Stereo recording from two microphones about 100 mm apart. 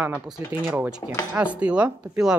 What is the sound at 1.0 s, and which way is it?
Speech, 40° left (ahead or behind).